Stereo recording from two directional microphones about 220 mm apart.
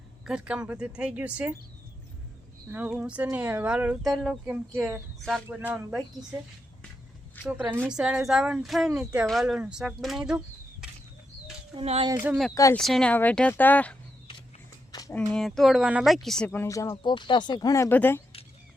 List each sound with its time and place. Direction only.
0.3 s speech: 5° right (ahead or behind)
2.6 s speech: 5° right (ahead or behind)
7.4 s speech: 10° right (ahead or behind)
11.7 s speech: 25° right (ahead or behind)
12.1 s speech: 10° right (ahead or behind)
12.7 s speech: centre (ahead or behind)
15.1 s speech: 5° left (ahead or behind)